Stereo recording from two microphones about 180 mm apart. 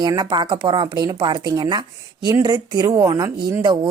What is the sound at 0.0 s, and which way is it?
Speech, 20° right (ahead or behind).